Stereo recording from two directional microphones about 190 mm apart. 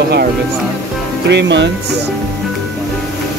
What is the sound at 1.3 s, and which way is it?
Speech, 70° right (ahead or behind).